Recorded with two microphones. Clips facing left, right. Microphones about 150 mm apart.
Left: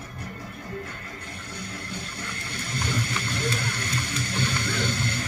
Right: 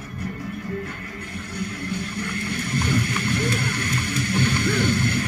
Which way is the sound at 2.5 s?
55° right (ahead or behind).